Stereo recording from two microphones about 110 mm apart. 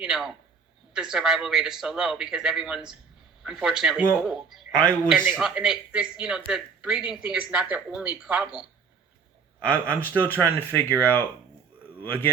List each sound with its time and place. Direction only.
0.0 s speech: 5° right (ahead or behind)
5.1 s speech: 15° right (ahead or behind)
5.4 s speech: 5° right (ahead or behind)
9.6 s speech: 10° left (ahead or behind)